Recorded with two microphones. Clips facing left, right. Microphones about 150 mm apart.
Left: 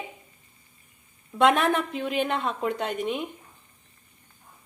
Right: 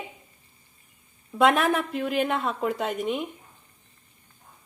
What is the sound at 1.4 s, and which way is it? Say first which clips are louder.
A woman's voice: even; centre (ahead or behind).